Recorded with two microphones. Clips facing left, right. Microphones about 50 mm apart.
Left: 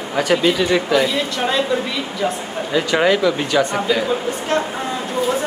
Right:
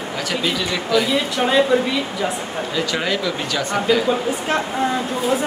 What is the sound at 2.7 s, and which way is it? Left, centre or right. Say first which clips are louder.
Speech: left 7 dB; centre.